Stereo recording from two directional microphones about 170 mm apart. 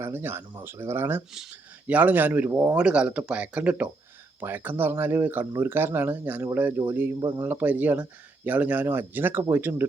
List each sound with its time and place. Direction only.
0.0 s speech: 15° right (ahead or behind)
7.2 s speech: 25° right (ahead or behind)
7.4 s speech: 10° right (ahead or behind)